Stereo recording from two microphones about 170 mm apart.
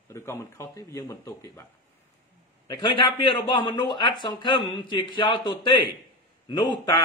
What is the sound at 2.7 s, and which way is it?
Speech, 30° left (ahead or behind).